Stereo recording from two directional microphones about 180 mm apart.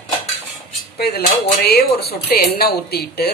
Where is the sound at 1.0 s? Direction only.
60° left (ahead or behind).